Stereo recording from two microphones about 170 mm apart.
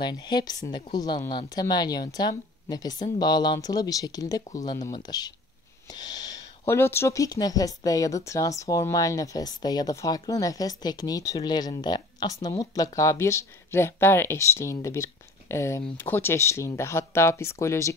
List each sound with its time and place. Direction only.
0.0 s speech: 25° left (ahead or behind)